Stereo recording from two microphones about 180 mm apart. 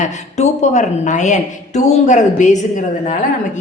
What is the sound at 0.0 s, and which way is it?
A woman's voice, 40° left (ahead or behind).